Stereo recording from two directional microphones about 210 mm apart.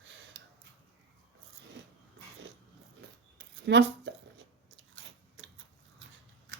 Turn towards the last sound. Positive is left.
turn(degrees=-65)  # may be behind; listen again after turning